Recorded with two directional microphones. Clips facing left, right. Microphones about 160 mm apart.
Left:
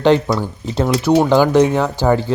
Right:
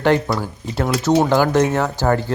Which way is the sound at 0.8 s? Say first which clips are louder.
Left 3 dB; 20° left (ahead or behind).